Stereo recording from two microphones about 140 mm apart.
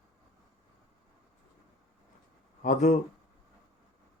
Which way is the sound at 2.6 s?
65° left (ahead or behind).